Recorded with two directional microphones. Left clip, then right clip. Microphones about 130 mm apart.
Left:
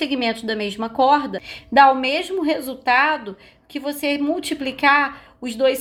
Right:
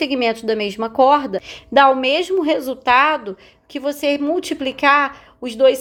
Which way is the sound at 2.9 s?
65° right (ahead or behind).